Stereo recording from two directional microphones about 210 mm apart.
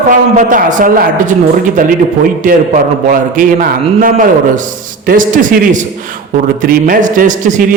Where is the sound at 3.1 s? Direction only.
40° right (ahead or behind).